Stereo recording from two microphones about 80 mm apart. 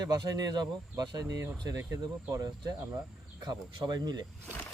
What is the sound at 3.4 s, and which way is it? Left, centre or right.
Speech, right.